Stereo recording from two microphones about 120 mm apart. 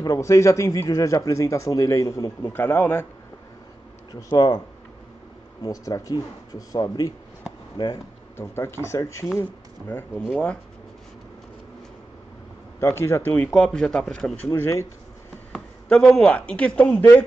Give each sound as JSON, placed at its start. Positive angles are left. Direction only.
{"t": 0.0, "sound": "speech", "side_deg": 30}
{"t": 2.4, "sound": "a man's voice", "side_deg": 15}
{"t": 4.1, "sound": "speech", "side_deg": 35}
{"t": 5.7, "sound": "speech", "side_deg": 30}
{"t": 8.4, "sound": "a man's voice", "side_deg": 20}
{"t": 12.8, "sound": "speech", "side_deg": 25}
{"t": 13.5, "sound": "a man's voice", "side_deg": 5}
{"t": 14.6, "sound": "speech", "side_deg": 20}
{"t": 15.5, "sound": "speech", "side_deg": 5}